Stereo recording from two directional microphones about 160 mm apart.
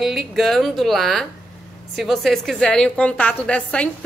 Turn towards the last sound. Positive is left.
turn(degrees=5)  # may be behind; listen again after turning